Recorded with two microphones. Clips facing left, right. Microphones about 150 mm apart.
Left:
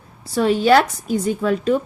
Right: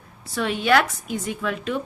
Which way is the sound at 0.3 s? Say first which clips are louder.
Left 6 dB; 35° left (ahead or behind).